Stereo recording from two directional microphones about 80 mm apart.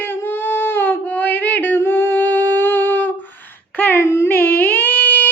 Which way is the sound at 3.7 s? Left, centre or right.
Left.